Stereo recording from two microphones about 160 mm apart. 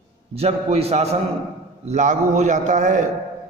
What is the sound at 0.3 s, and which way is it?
A man's voice, 40° right (ahead or behind).